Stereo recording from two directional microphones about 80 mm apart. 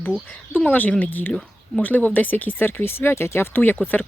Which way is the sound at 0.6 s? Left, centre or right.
Left.